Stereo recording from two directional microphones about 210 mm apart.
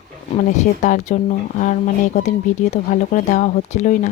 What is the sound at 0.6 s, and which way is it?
Speech, 35° left (ahead or behind).